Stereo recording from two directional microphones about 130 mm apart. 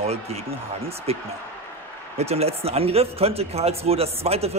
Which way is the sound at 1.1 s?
50° right (ahead or behind).